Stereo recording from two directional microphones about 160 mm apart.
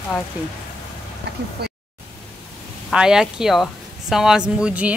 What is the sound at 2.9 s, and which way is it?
Speech, 5° right (ahead or behind).